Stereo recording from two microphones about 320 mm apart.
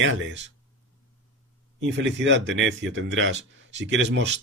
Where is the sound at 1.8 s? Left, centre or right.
Right.